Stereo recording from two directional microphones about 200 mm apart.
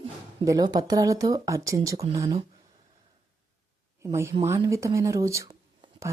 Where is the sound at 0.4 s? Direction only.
20° right (ahead or behind).